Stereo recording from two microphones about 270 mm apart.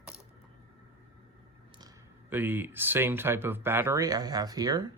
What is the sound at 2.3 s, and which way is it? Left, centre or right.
Speech, centre.